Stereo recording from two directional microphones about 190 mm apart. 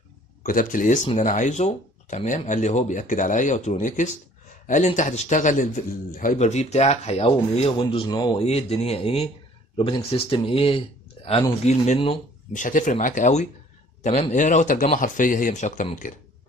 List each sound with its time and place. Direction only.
0.4 s a man's voice: 45° left (ahead or behind)